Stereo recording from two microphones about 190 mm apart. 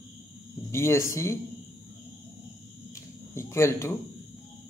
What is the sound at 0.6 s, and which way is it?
Speech, 15° left (ahead or behind).